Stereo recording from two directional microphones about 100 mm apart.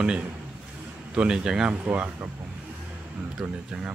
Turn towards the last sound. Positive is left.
turn(degrees=-10)  # may be behind; listen again after turning